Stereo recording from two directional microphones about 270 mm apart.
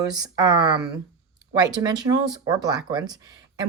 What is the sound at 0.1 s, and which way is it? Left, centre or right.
A woman's voice, centre.